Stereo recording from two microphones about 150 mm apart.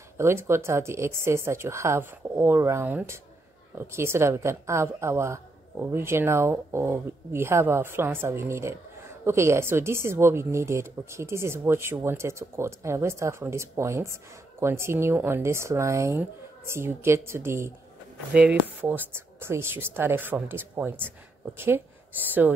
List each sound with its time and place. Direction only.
0.2 s speech: 15° right (ahead or behind)